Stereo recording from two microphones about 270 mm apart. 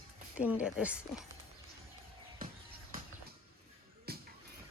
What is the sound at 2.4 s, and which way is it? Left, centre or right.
Music, right.